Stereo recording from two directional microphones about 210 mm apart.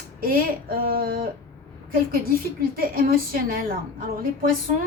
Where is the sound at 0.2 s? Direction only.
45° right (ahead or behind).